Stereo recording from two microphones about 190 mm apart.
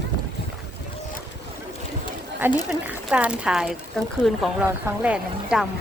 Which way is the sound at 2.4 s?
10° right (ahead or behind).